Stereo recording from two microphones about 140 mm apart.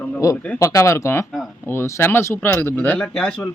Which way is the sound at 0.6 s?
20° left (ahead or behind).